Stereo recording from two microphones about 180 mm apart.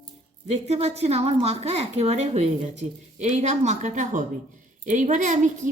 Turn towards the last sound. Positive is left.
turn(degrees=-45)  # may be behind; listen again after turning